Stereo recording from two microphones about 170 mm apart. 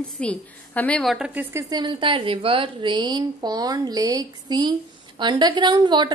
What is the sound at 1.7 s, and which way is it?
A woman's voice, 30° right (ahead or behind).